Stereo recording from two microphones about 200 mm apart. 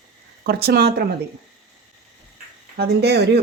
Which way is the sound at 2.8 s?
55° right (ahead or behind).